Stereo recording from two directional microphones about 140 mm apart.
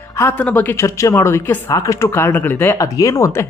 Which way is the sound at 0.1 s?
20° left (ahead or behind).